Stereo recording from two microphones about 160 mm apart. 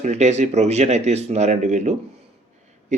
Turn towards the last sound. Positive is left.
turn(degrees=-45)  # may be behind; listen again after turning